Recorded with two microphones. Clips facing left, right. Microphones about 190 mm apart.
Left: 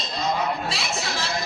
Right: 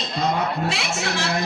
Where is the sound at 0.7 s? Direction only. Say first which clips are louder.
Right 3 dB; 70° right (ahead or behind).